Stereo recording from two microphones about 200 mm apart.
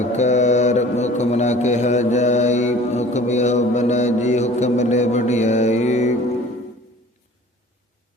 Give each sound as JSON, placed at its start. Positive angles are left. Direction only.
{"t": 0.0, "sound": "mantra", "side_deg": 35}